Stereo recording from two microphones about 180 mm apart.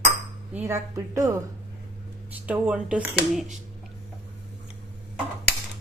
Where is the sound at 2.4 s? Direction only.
10° right (ahead or behind).